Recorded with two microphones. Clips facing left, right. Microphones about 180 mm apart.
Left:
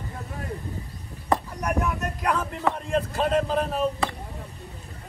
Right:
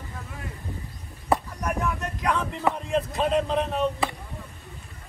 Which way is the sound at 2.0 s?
5° left (ahead or behind).